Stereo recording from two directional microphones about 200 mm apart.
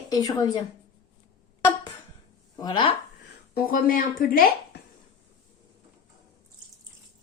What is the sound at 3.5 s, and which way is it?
A woman's voice, 45° left (ahead or behind).